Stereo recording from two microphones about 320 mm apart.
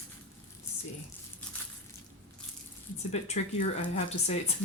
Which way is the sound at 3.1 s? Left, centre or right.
Left.